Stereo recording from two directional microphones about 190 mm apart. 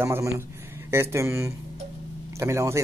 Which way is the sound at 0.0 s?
15° right (ahead or behind).